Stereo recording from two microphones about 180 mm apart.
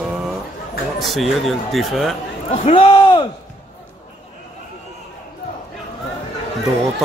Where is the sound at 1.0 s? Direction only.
Centre (ahead or behind).